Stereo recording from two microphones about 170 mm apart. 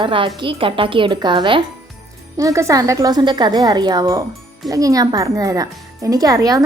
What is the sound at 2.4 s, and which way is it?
Speech, 15° right (ahead or behind).